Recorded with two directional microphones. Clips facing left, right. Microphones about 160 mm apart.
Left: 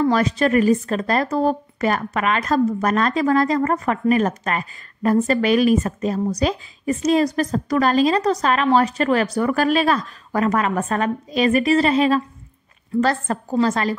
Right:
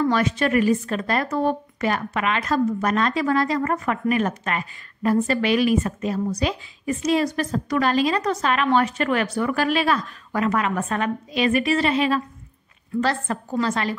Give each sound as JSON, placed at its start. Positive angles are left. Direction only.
{"t": 0.0, "sound": "a woman's voice", "side_deg": 35}